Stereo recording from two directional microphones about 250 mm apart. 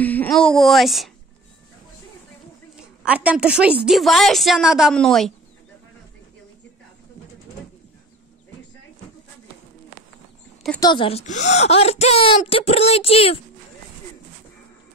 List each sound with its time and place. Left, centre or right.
0.0 s a child's voice: centre
3.1 s a woman's voice: centre
10.8 s a woman's voice: centre